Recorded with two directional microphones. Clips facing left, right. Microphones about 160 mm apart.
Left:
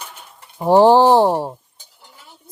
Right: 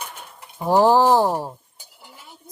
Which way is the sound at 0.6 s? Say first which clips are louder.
Left 5 dB; 30° left (ahead or behind).